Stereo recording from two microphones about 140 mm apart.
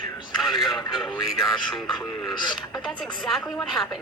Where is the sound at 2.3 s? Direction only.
35° left (ahead or behind).